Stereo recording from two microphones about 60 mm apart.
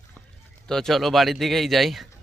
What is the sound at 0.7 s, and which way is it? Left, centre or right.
Speech, centre.